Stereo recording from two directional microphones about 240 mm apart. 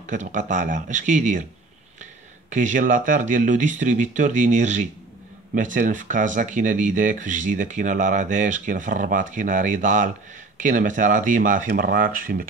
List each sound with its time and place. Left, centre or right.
0.0 s speech: right
2.5 s speech: right